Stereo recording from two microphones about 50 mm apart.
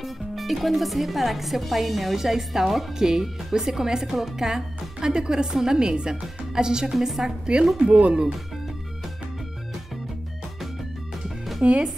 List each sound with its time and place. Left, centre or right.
0.0 s speech: centre
7.8 s speech: right
11.6 s speech: centre